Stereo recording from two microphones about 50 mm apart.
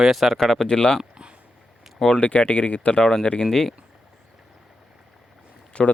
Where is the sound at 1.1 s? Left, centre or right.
Centre.